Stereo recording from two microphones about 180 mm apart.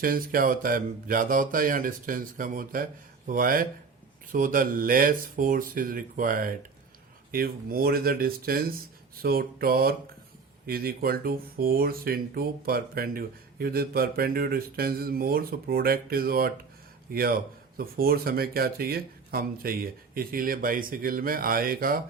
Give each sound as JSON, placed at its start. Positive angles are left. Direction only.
{"t": 0.0, "sound": "speech", "side_deg": -50}